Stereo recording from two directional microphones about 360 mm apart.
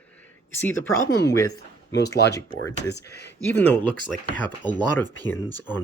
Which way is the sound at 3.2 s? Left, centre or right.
Centre.